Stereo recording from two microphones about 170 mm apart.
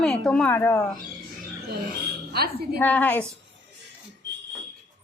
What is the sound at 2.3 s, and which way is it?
Speech, 65° right (ahead or behind).